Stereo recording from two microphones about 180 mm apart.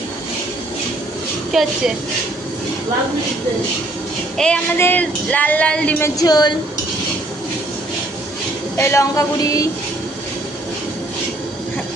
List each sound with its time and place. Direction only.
1.5 s a woman's voice: centre (ahead or behind)
4.4 s speech: 5° left (ahead or behind)
6.1 s a woman's voice: 20° left (ahead or behind)
8.8 s speech: 15° left (ahead or behind)